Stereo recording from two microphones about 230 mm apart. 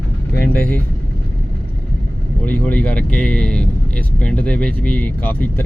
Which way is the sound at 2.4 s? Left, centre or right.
Centre.